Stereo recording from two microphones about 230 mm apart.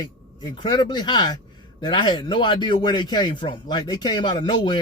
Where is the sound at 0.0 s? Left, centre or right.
Centre.